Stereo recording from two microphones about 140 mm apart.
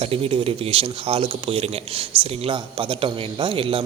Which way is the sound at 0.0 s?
45° right (ahead or behind).